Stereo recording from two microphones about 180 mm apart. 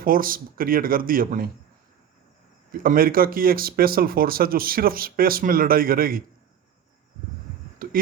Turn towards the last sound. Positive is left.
turn(degrees=-50)  # may be behind; listen again after turning